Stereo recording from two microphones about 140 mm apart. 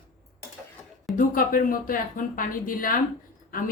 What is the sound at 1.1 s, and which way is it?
A woman's voice, 80° left.